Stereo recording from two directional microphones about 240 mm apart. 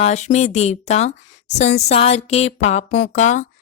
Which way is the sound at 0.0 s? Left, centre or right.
Left.